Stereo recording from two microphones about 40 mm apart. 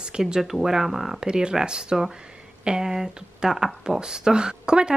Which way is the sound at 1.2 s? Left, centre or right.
Right.